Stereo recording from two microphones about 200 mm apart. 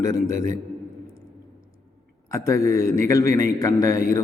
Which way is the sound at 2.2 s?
15° left (ahead or behind).